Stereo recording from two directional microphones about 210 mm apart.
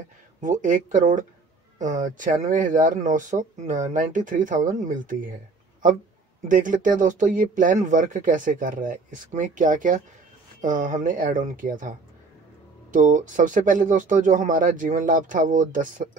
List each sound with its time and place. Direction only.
0.4 s speech: 35° right (ahead or behind)
6.4 s speech: 40° right (ahead or behind)
12.9 s speech: 40° right (ahead or behind)